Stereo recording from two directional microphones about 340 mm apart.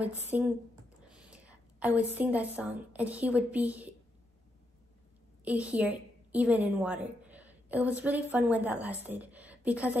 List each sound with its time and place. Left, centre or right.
0.0 s a woman's voice: centre
1.0 s whispering: centre
2.1 s a woman's voice: centre
5.4 s a woman's voice: centre